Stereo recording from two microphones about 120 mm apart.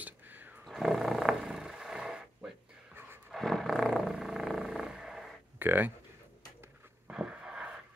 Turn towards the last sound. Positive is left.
turn(degrees=-10)  # may be behind; listen again after turning